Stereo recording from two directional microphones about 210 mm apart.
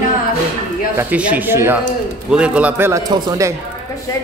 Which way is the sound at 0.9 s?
5° right (ahead or behind).